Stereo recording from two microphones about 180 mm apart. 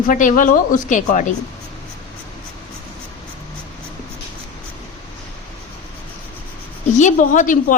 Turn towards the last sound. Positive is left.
turn(degrees=45)  # may be behind; listen again after turning